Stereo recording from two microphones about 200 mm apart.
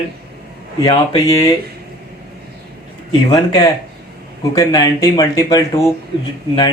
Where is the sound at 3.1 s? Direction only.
20° left (ahead or behind).